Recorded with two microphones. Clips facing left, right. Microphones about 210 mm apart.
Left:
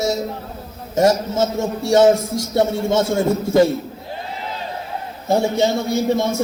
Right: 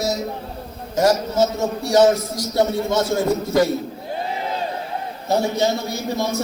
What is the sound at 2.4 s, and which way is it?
A man's voice, 25° left (ahead or behind).